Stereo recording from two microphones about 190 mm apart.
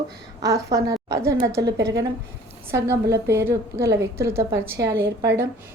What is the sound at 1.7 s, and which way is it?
Speech, 60° right (ahead or behind).